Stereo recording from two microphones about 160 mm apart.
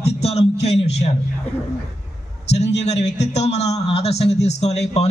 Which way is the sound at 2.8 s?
45° left (ahead or behind).